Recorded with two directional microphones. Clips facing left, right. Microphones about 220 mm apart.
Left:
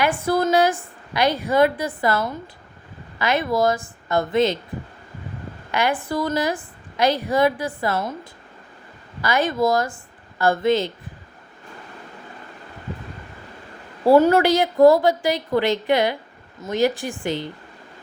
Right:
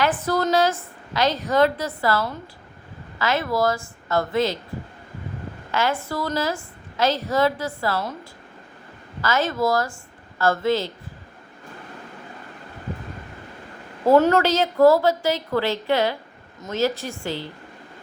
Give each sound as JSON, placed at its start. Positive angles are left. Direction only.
{"t": 0.0, "sound": "a woman's voice", "side_deg": 15}
{"t": 5.7, "sound": "a woman's voice", "side_deg": 15}
{"t": 14.3, "sound": "a woman's voice", "side_deg": 15}